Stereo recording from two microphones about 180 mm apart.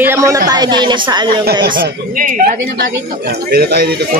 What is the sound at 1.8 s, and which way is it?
Speech, 50° right (ahead or behind).